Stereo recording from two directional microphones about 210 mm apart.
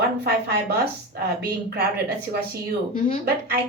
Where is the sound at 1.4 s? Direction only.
45° right (ahead or behind).